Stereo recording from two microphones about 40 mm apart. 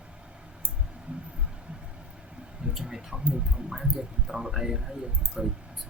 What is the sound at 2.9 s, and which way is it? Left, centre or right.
Speech, centre.